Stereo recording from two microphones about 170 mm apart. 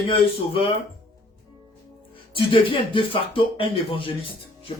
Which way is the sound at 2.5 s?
30° left (ahead or behind).